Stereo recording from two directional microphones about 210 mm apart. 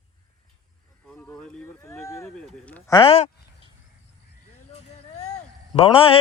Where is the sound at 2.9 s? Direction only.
25° left (ahead or behind).